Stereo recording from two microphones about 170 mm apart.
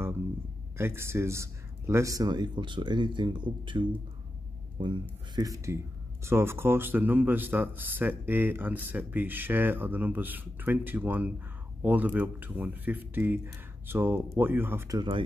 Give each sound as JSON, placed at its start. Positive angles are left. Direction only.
{"t": 0.7, "sound": "speech", "side_deg": -15}
{"t": 15.0, "sound": "speech", "side_deg": -30}